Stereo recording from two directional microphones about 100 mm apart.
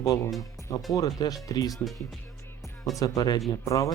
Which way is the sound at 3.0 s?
40° left (ahead or behind).